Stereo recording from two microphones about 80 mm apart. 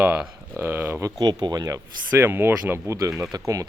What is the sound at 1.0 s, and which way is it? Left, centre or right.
Speech, right.